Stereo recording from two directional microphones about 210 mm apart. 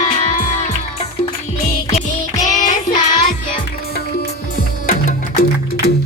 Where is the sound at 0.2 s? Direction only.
40° left (ahead or behind).